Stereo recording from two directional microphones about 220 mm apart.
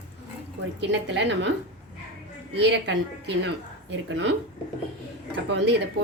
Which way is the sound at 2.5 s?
50° right (ahead or behind).